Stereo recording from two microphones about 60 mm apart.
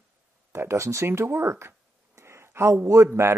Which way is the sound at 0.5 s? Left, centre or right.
Right.